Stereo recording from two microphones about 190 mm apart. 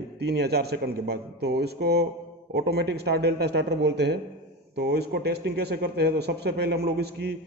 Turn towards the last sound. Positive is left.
turn(degrees=-60)  # may be behind; listen again after turning